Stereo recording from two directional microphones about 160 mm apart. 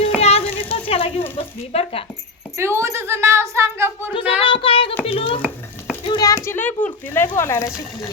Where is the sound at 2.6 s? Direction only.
15° right (ahead or behind).